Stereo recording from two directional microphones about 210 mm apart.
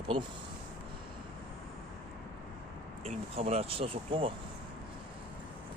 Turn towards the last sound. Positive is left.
turn(degrees=-25)  # may be behind; listen again after turning